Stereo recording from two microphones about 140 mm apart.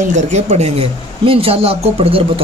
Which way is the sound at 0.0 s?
55° right (ahead or behind).